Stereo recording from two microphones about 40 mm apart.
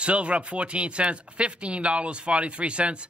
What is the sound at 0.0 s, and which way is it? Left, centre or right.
Speech, right.